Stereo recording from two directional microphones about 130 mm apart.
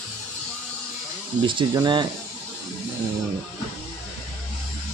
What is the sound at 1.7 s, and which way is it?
Speech, 35° right (ahead or behind).